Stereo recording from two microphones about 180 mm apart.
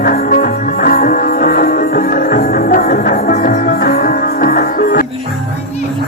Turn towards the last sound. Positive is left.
turn(degrees=50)  # may be behind; listen again after turning